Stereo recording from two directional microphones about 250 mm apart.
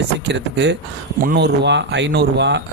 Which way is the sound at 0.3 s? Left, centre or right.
Right.